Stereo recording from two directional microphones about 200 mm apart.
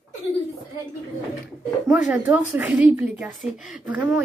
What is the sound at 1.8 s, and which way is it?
Speech, 5° right (ahead or behind).